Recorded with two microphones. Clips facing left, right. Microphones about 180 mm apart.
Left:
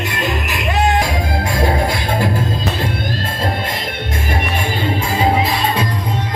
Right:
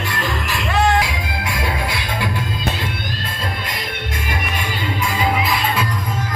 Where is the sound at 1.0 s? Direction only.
45° left (ahead or behind).